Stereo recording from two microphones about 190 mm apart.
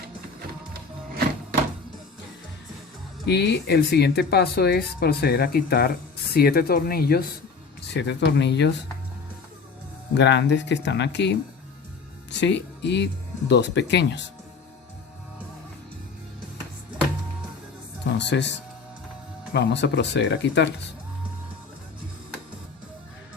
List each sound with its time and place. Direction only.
0.7 s music: 55° right (ahead or behind)
3.2 s speech: 60° left (ahead or behind)
7.8 s speech: 65° left (ahead or behind)
10.2 s speech: 70° left (ahead or behind)
18.0 s music: 65° left (ahead or behind)
19.5 s speech: 65° left (ahead or behind)